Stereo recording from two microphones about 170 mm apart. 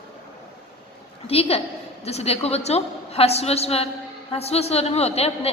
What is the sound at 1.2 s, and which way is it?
A woman's voice, 35° left (ahead or behind).